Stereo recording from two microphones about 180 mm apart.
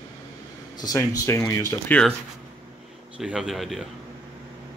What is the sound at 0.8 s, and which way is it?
A man's voice, 20° left (ahead or behind).